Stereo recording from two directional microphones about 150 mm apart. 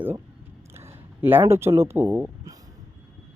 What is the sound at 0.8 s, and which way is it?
Speech, 15° right (ahead or behind).